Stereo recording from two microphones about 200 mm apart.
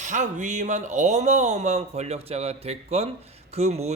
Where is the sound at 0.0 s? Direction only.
35° right (ahead or behind).